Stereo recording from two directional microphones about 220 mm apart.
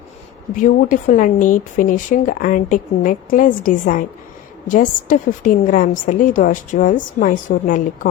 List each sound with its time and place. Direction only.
0.6 s speech: 35° left (ahead or behind)